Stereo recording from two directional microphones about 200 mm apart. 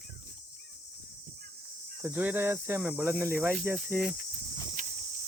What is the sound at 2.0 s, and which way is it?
Cricket, 10° right (ahead or behind).